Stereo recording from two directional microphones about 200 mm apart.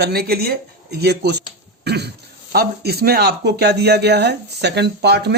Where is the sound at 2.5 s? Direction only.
50° right (ahead or behind).